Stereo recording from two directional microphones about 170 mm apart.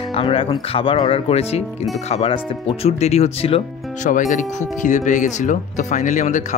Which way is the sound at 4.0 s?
50° left (ahead or behind).